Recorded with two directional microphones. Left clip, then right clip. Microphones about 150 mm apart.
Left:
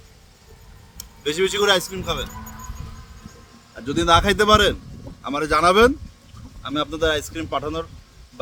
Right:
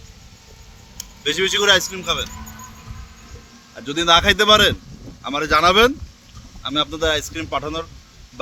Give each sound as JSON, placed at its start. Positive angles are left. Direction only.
{"t": 0.9, "sound": "speech", "side_deg": 30}
{"t": 3.8, "sound": "a man's voice", "side_deg": 25}